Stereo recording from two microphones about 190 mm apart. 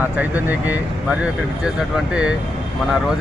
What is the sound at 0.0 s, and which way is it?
Speech, 10° right (ahead or behind).